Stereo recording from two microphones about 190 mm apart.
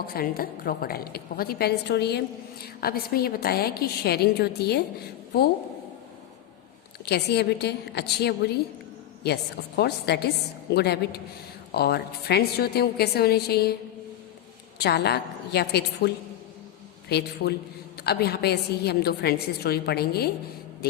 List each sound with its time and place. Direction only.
0.1 s a woman's voice: 50° left (ahead or behind)
7.0 s a woman's voice: 60° left (ahead or behind)
14.8 s a woman's voice: 60° left (ahead or behind)
17.1 s a woman's voice: 60° left (ahead or behind)